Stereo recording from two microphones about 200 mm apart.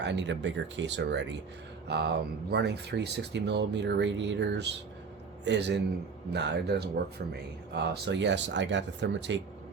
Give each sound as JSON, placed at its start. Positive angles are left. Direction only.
{"t": 0.0, "sound": "speech", "side_deg": -60}